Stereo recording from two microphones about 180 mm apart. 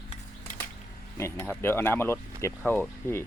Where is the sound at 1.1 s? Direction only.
15° left (ahead or behind).